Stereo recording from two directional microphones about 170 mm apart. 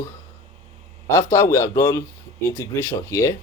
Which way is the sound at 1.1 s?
15° left (ahead or behind).